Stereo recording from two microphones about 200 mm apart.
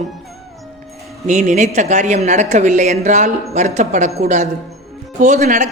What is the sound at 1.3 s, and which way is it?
A man's voice, 35° right (ahead or behind).